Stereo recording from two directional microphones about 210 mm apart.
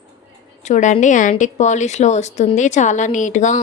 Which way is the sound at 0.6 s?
35° left (ahead or behind).